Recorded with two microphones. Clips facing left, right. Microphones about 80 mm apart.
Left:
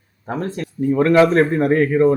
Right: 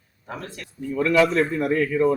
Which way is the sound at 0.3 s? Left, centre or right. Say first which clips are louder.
Left 11 dB; left.